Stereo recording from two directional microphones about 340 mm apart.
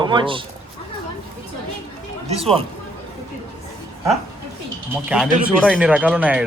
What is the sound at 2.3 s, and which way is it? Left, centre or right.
Speech, centre.